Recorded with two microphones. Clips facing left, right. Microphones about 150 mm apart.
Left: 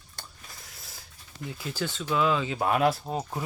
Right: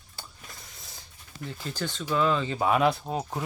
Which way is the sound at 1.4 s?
10° left (ahead or behind).